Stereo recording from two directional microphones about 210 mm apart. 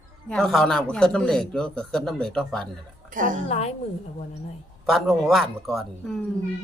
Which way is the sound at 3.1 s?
40° right (ahead or behind).